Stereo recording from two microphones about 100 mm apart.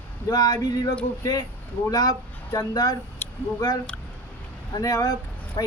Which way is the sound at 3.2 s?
20° left (ahead or behind).